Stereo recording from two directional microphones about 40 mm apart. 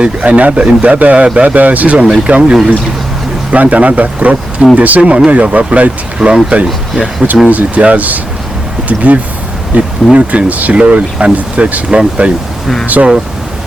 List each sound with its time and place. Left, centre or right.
0.0 s speech: right
1.2 s speech: right
1.5 s speech: right
2.0 s speech: right
3.5 s speech: right
6.1 s speech: centre
6.7 s speech: centre
7.4 s speech: right
11.9 s speech: right
12.8 s speech: right